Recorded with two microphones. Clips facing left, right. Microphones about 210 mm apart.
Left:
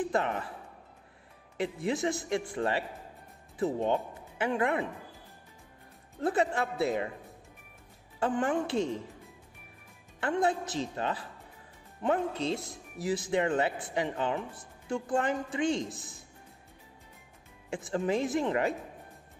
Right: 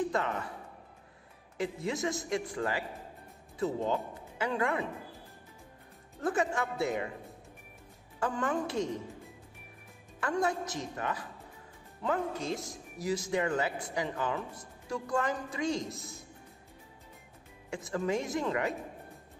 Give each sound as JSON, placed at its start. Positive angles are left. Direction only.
{"t": 0.1, "sound": "speech", "side_deg": 30}
{"t": 1.6, "sound": "speech", "side_deg": 30}
{"t": 3.8, "sound": "speech", "side_deg": 25}
{"t": 6.2, "sound": "speech", "side_deg": 25}
{"t": 8.2, "sound": "speech", "side_deg": 25}
{"t": 10.2, "sound": "speech", "side_deg": 30}
{"t": 17.7, "sound": "speech", "side_deg": 30}